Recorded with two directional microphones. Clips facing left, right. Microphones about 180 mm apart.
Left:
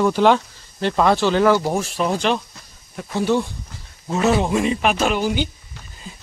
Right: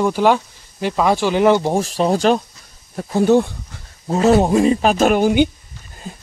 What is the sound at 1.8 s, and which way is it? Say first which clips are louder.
Speech: right 5 dB; 35° right (ahead or behind).